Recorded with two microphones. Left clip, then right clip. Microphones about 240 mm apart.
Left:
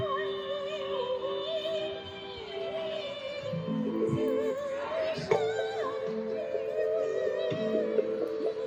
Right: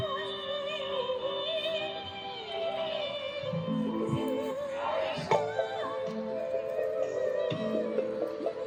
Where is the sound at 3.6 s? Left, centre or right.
Centre.